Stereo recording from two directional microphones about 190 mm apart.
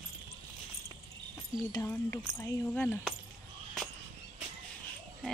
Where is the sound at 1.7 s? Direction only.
15° left (ahead or behind).